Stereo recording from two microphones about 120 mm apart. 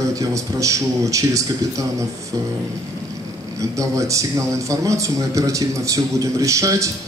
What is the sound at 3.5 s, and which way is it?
A man's voice, 25° right (ahead or behind).